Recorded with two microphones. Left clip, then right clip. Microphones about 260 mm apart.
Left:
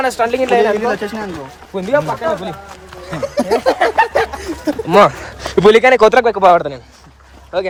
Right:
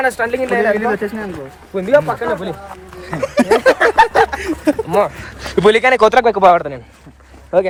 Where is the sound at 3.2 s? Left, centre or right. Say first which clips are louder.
Right 3 dB; right.